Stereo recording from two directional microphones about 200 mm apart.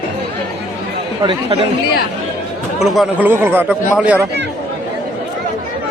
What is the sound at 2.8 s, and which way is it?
Speech, 5° right (ahead or behind).